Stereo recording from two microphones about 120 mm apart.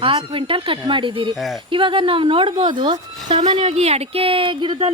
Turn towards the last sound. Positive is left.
turn(degrees=-45)  # may be behind; listen again after turning